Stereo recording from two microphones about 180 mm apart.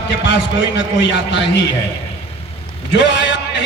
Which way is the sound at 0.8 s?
80° left.